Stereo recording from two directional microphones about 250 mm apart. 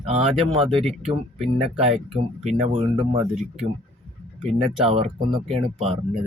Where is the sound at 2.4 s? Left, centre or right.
Right.